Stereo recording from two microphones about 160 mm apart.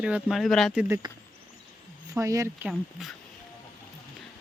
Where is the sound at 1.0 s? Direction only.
25° right (ahead or behind).